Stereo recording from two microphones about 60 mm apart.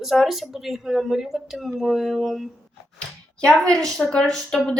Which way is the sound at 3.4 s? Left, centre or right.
Centre.